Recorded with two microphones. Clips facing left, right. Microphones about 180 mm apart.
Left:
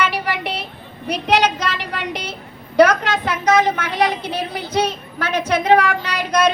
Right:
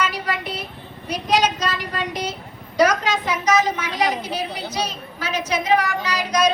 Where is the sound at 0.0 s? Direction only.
65° left (ahead or behind).